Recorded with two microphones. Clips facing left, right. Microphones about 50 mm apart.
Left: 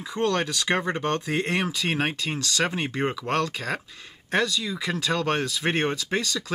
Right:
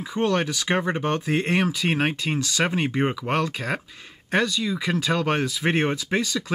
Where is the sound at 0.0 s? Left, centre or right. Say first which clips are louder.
Right 2 dB; centre.